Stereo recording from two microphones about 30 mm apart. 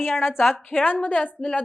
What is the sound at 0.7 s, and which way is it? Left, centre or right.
Speech, left.